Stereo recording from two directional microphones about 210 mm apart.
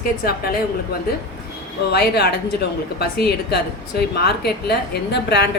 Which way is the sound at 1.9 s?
50° left (ahead or behind).